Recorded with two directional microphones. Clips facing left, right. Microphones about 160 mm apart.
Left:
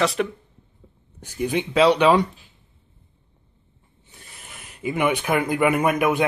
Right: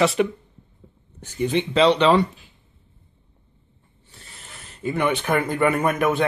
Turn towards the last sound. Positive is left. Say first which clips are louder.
# left 1 dB
turn(degrees=10)  # may be behind; listen again after turning